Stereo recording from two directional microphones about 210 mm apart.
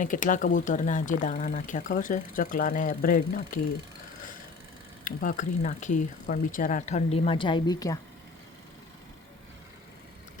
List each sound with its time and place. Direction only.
0.0 s speech: 40° left (ahead or behind)
5.0 s speech: 40° left (ahead or behind); by 7.9 s 15° left (ahead or behind)